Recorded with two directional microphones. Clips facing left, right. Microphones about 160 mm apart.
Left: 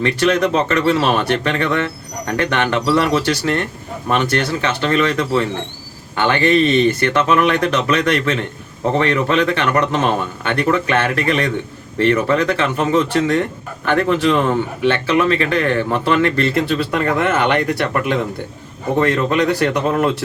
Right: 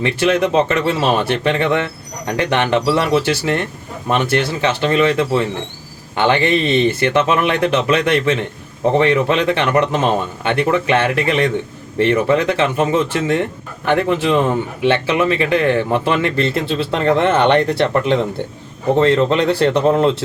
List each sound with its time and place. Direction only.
0.0 s a man's voice: 25° right (ahead or behind)